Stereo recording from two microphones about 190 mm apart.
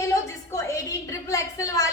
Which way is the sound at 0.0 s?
15° left (ahead or behind).